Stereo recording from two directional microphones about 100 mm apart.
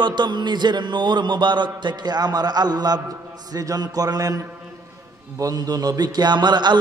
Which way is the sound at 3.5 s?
40° right (ahead or behind).